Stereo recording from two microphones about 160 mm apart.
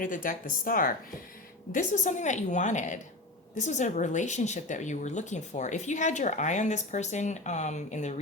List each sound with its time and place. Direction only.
0.0 s speech: 55° left (ahead or behind)